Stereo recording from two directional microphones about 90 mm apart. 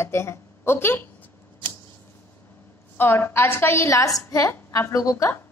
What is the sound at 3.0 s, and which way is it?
A woman's voice, 25° left (ahead or behind).